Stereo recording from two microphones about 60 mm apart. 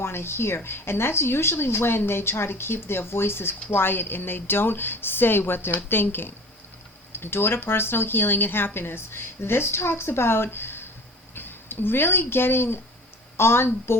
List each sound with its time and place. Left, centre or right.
0.0 s a woman's voice: left